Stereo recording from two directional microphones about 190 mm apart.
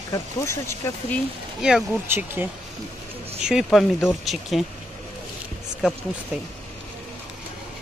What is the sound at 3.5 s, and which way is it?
Speech, centre (ahead or behind).